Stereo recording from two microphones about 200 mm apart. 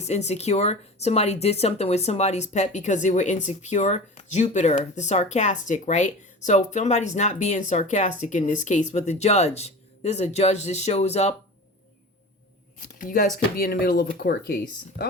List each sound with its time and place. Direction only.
0.0 s speech: 35° left (ahead or behind)
13.0 s speech: 40° left (ahead or behind)